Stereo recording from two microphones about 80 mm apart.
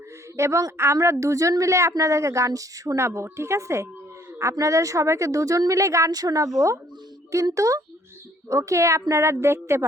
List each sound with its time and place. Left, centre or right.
0.3 s a woman's voice: right
6.1 s a woman's voice: right
7.5 s a woman's voice: right